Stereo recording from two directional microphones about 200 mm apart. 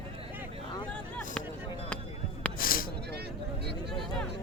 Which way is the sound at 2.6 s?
45° left (ahead or behind).